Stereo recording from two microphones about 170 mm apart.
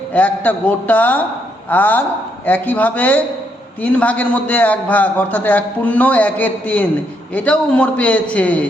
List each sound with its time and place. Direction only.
0.1 s a man's voice: 10° left (ahead or behind)